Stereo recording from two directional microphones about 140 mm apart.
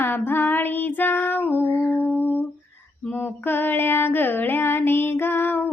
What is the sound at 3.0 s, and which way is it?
Child singing, 10° left (ahead or behind).